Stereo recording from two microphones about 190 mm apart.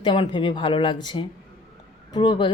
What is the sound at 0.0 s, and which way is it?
Speech, 25° left (ahead or behind).